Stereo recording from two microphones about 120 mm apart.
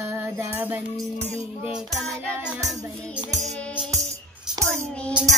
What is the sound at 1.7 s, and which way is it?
Child singing, centre (ahead or behind).